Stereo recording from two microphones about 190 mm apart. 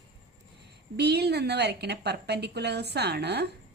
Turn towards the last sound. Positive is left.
turn(degrees=-60)  # may be behind; listen again after turning